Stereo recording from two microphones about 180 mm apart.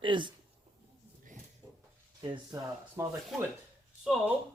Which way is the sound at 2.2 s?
25° right (ahead or behind).